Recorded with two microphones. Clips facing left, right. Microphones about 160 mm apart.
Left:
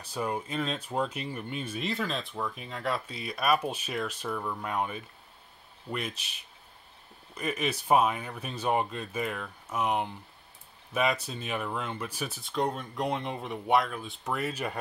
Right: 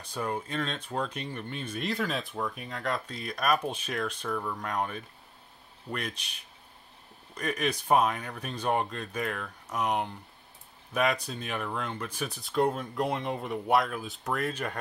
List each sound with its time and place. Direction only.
0.0 s speech: 10° left (ahead or behind)